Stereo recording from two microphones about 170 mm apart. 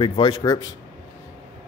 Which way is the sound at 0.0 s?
30° left (ahead or behind).